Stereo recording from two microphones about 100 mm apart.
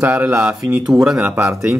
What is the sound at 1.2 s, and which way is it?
Speech, 15° right (ahead or behind).